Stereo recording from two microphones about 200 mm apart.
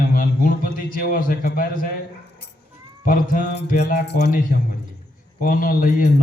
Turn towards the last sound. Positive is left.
turn(degrees=45)  # may be behind; listen again after turning